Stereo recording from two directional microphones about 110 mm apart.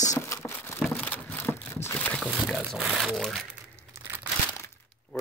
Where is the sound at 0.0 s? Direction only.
30° left (ahead or behind).